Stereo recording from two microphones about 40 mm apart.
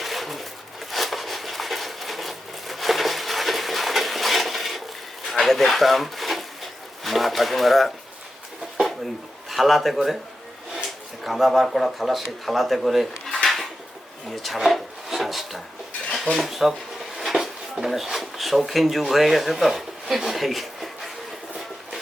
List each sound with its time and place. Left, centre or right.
0.0 s a sound: centre
9.5 s speech: centre
11.2 s speech: centre
13.2 s dishes: centre
14.4 s speech: centre
16.0 s dishes: centre
17.2 s speech: centre